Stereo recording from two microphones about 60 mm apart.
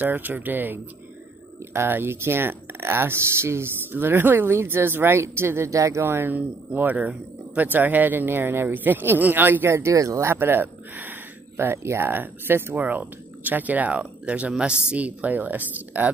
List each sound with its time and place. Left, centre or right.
0.0 s speech: right
6.3 s speech: right
9.7 s speech: right
10.3 s a sound: right
11.7 s speech: right